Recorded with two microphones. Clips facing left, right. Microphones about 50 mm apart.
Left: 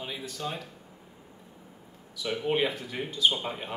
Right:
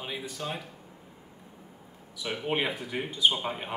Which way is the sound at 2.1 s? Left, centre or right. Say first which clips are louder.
Left 2 dB; centre.